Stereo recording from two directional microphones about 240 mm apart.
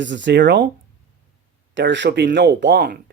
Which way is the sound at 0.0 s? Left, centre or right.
Right.